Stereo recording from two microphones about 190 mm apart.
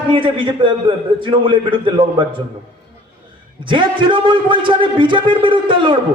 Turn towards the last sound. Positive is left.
turn(degrees=-25)  # may be behind; listen again after turning